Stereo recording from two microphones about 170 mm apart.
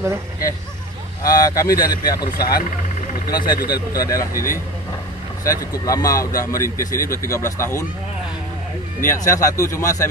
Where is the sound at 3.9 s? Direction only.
20° left (ahead or behind).